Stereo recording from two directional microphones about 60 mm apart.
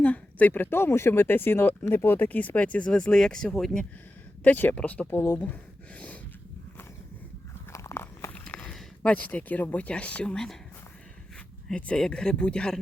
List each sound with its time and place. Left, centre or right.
0.0 s speech: left
2.9 s speech: centre
4.4 s speech: left
5.1 s speech: left
7.7 s biting: left
8.3 s walk: left
9.0 s speech: left
10.3 s speech: centre
11.7 s speech: centre